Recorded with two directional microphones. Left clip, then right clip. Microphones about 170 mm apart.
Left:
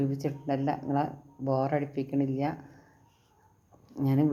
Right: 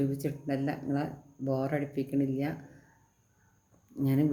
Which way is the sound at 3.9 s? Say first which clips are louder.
Left 2 dB; 15° right (ahead or behind).